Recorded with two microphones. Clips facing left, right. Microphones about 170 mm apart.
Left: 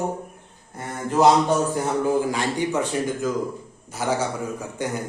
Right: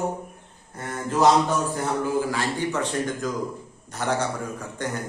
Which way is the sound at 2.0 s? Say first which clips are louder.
Left 3 dB; 20° left (ahead or behind).